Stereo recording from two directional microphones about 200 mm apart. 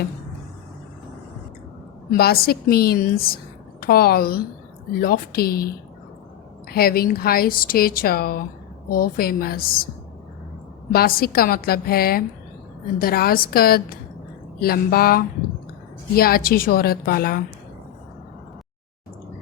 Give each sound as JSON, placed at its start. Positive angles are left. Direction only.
{"t": 2.1, "sound": "speech", "side_deg": 50}
{"t": 10.9, "sound": "speech", "side_deg": 50}